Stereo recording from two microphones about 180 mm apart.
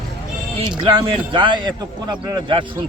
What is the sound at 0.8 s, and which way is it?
Speech, 30° right (ahead or behind).